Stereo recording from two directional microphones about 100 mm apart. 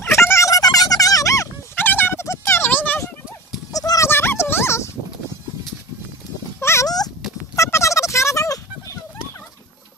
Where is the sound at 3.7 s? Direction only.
35° left (ahead or behind).